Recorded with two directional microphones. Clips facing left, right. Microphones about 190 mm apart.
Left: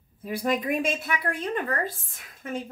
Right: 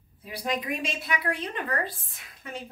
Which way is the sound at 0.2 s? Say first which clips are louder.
Left 5 dB; 50° left (ahead or behind).